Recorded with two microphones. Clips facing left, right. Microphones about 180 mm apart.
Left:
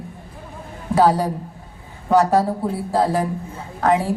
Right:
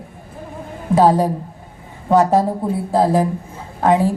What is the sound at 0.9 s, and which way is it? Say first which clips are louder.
A woman's voice: right 3 dB; 30° right (ahead or behind).